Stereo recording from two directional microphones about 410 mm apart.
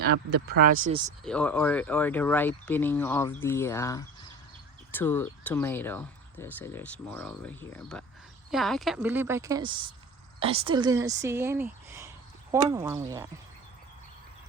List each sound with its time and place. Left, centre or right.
0.0 s speech: right
1.2 s speech: centre